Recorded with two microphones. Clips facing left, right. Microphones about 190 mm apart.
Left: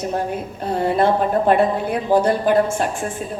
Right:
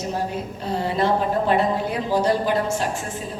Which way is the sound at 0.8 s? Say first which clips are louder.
Left 4 dB; 55° left (ahead or behind).